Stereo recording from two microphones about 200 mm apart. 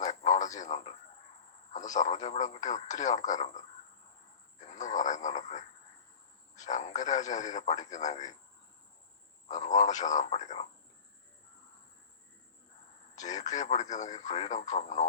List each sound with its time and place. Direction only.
0.0 s radio: 35° left (ahead or behind)
1.7 s speech: 35° left (ahead or behind)
4.6 s a sound: 35° left (ahead or behind)
6.6 s speech: 35° left (ahead or behind)
9.5 s speech: 35° left (ahead or behind)
13.1 s speech: 35° left (ahead or behind)